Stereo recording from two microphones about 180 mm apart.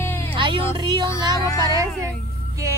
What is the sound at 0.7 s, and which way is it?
Music, 25° right (ahead or behind).